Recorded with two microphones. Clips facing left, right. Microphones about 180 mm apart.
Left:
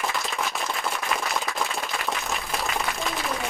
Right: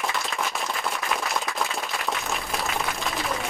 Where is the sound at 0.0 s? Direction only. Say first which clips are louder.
Even; centre (ahead or behind).